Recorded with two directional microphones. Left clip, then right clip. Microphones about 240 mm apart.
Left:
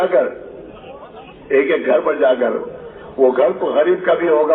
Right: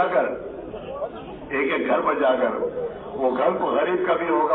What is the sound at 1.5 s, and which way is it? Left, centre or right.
A man's voice, left.